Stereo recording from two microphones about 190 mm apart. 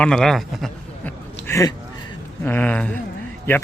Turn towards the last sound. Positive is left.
turn(degrees=10)  # may be behind; listen again after turning